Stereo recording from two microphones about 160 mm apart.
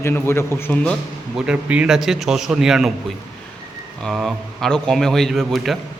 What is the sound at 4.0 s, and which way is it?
A man's voice, centre (ahead or behind).